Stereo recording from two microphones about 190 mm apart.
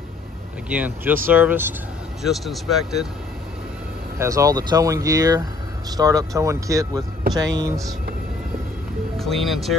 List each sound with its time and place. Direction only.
0.7 s speech: 10° right (ahead or behind)
4.2 s speech: 15° right (ahead or behind)
9.2 s speech: centre (ahead or behind)